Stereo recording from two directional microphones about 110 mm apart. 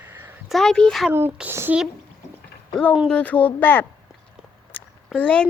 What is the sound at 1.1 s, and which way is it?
Speech, 20° right (ahead or behind).